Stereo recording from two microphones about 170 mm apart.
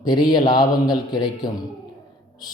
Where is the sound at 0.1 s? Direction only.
25° left (ahead or behind).